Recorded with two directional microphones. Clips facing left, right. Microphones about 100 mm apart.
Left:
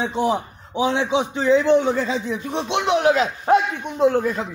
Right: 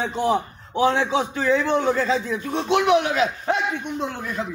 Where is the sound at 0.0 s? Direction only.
20° left (ahead or behind).